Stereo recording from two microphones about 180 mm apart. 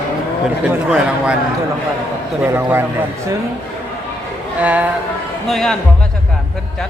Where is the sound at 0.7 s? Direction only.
5° right (ahead or behind).